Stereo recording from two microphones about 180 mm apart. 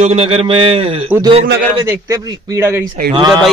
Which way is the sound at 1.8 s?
15° right (ahead or behind).